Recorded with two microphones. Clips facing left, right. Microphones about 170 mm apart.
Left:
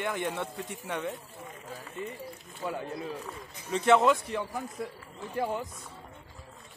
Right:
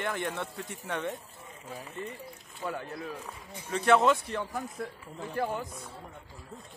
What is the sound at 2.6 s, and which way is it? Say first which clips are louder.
Speech: left 1 dB; 15° left (ahead or behind).